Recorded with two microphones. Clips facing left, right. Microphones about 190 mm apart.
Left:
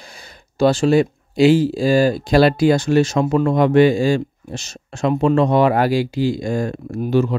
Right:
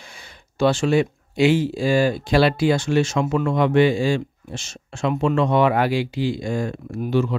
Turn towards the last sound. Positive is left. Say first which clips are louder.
# left 4 dB
turn(degrees=40)  # may be behind; listen again after turning